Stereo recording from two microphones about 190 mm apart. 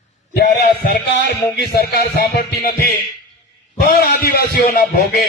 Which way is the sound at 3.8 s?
50° left (ahead or behind).